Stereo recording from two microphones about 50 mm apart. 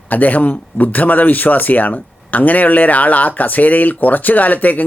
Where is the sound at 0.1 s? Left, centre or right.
Left.